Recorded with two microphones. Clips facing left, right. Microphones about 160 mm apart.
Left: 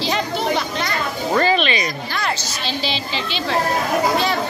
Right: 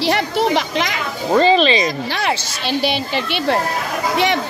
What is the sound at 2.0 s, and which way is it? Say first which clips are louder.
A woman's voice: right 3 dB; 75° right (ahead or behind).